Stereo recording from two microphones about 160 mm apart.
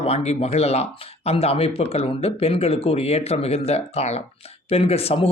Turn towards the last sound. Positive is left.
turn(degrees=40)  # may be behind; listen again after turning